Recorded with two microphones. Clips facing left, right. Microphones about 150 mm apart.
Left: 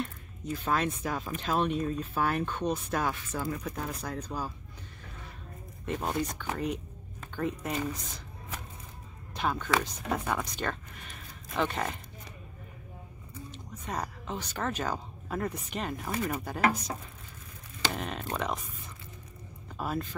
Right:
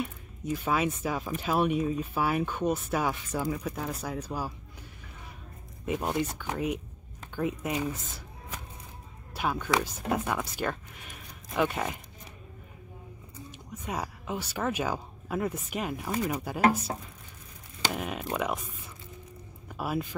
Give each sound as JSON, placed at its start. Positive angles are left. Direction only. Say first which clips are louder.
{"t": 0.0, "sound": "speech", "louder": "right 2 dB", "side_deg": -10}
{"t": 5.9, "sound": "speech", "louder": "right 2 dB", "side_deg": -5}
{"t": 9.3, "sound": "speech", "louder": "right 1 dB", "side_deg": -5}
{"t": 13.5, "sound": "speech", "louder": "right 2 dB", "side_deg": -10}
{"t": 17.9, "sound": "speech", "louder": "right 2 dB", "side_deg": -5}
{"t": 19.7, "sound": "speech", "louder": "right 2 dB", "side_deg": -10}